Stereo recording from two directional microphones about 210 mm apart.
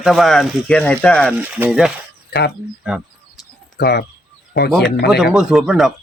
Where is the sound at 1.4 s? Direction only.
10° right (ahead or behind).